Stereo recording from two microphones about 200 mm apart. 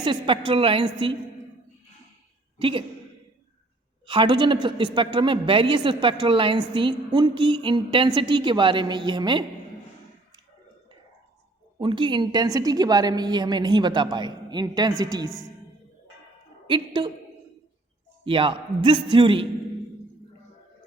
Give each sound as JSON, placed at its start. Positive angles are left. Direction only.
{"t": 0.0, "sound": "a woman's voice", "side_deg": -25}
{"t": 2.6, "sound": "a woman's voice", "side_deg": -25}
{"t": 4.0, "sound": "a woman's voice", "side_deg": -25}
{"t": 11.8, "sound": "a woman's voice", "side_deg": -25}
{"t": 15.3, "sound": "a woman's voice", "side_deg": 20}
{"t": 16.6, "sound": "a woman's voice", "side_deg": -25}
{"t": 18.3, "sound": "a woman's voice", "side_deg": -25}